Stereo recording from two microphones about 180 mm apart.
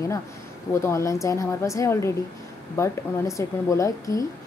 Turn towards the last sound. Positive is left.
turn(degrees=20)  # may be behind; listen again after turning